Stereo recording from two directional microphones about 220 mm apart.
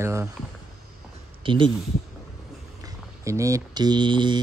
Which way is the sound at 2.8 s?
15° right (ahead or behind).